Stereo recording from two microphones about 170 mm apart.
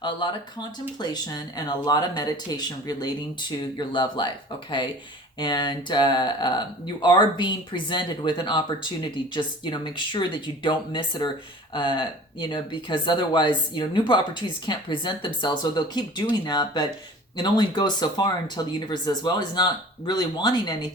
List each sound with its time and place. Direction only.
0.0 s speech: 30° left (ahead or behind)
5.4 s speech: 25° left (ahead or behind)